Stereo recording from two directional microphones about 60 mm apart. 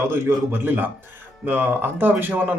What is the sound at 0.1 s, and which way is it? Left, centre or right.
Speech, right.